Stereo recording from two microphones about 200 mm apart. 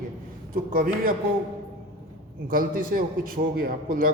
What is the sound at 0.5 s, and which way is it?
Speech, 45° right (ahead or behind).